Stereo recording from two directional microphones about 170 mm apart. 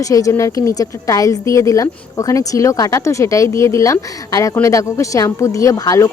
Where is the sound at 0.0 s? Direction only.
20° left (ahead or behind).